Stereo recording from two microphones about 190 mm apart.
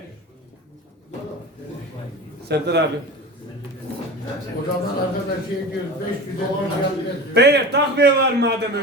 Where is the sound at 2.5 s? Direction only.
60° right (ahead or behind).